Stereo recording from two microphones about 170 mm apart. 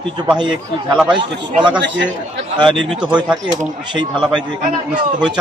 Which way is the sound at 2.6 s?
30° right (ahead or behind).